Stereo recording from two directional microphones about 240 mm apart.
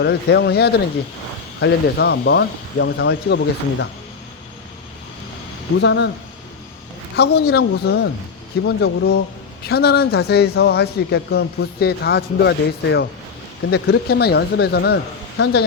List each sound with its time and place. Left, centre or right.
0.0 s speech: left
5.8 s speech: left
7.2 s speech: left